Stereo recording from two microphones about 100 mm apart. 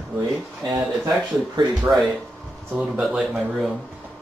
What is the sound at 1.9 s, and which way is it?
Speech, 20° right (ahead or behind).